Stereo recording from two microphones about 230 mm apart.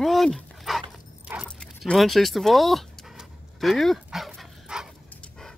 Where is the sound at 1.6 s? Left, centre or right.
Centre.